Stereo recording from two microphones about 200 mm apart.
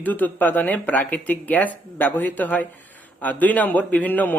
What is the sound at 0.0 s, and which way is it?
Speech, 10° left (ahead or behind).